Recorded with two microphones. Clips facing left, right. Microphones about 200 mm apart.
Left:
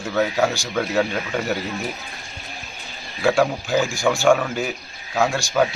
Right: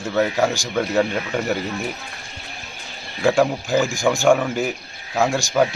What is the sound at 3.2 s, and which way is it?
Speech, 5° right (ahead or behind).